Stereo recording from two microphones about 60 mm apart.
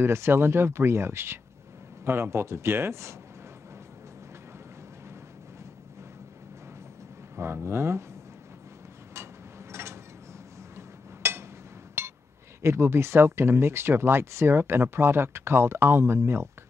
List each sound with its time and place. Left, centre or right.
0.0 s speech: right
7.3 s speech: right
9.1 s mechanisms: right
10.8 s a sound: right
12.0 s chink: right
12.6 s speech: right